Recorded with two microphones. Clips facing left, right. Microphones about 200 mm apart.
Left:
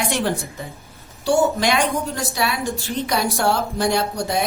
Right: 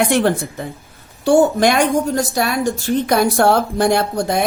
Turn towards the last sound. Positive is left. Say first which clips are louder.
# right 4 dB
turn(degrees=-55)  # may be behind; listen again after turning